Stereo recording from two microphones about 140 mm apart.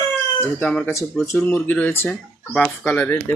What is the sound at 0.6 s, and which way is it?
Speech, 5° left (ahead or behind).